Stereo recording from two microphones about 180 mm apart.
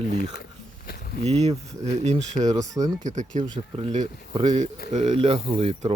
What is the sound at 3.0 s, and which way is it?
Speech, 40° right (ahead or behind).